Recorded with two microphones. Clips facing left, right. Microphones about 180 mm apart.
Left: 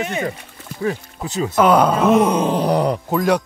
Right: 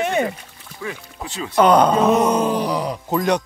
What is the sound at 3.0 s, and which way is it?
Speech, 5° left (ahead or behind).